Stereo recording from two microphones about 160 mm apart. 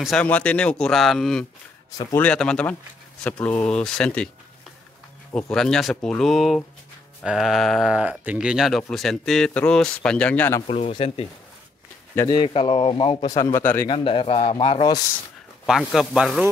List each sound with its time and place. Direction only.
0.0 s speech: 5° left (ahead or behind)
5.3 s speech: 5° left (ahead or behind)
10.7 s speech: 40° left (ahead or behind)
12.3 s speech: 30° left (ahead or behind)
13.3 s speech: 20° left (ahead or behind)
13.8 s speech: 35° left (ahead or behind)
15.6 s speech: 5° right (ahead or behind)